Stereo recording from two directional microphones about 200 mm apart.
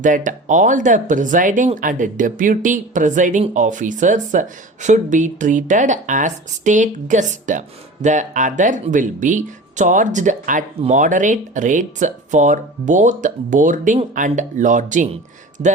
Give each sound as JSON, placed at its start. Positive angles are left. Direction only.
{"t": 0.0, "sound": "speech", "side_deg": -40}